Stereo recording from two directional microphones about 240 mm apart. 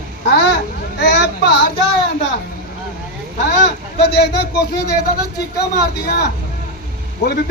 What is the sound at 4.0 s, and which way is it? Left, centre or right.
Speech, left.